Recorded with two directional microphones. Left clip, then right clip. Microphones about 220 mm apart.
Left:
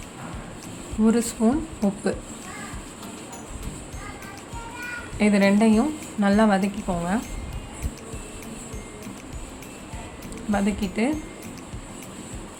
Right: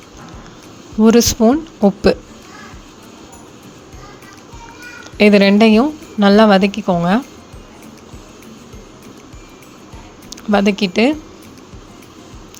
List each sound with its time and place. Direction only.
1.0 s a woman's voice: 40° right (ahead or behind)
5.1 s a woman's voice: 40° right (ahead or behind)
10.5 s a woman's voice: 40° right (ahead or behind)